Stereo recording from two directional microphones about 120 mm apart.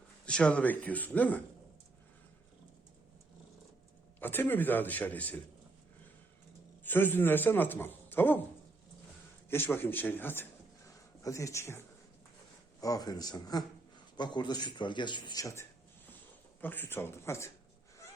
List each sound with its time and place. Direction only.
0.3 s a man's voice: 10° left (ahead or behind)
4.2 s a man's voice: 15° left (ahead or behind)
6.8 s a man's voice: 15° left (ahead or behind)
9.5 s a man's voice: 20° left (ahead or behind)
10.8 s a sound: 25° left (ahead or behind)
12.8 s speech: 30° left (ahead or behind)
16.6 s speech: 15° left (ahead or behind)